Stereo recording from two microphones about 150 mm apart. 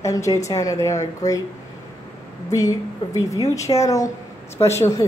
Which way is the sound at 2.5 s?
20° left (ahead or behind).